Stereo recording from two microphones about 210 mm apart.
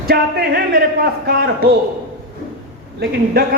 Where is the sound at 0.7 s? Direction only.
50° right (ahead or behind).